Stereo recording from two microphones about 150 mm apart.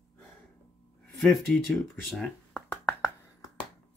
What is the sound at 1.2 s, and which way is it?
Speech, centre (ahead or behind).